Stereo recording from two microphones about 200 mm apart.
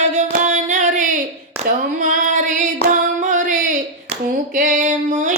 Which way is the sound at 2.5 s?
40° right (ahead or behind).